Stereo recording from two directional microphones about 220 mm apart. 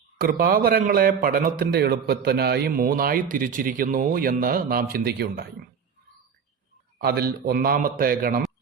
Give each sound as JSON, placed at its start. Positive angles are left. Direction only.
{"t": 0.2, "sound": "a man's voice", "side_deg": -45}
{"t": 7.0, "sound": "a man's voice", "side_deg": -45}